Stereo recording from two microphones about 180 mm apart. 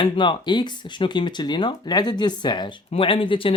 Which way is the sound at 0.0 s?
25° left (ahead or behind).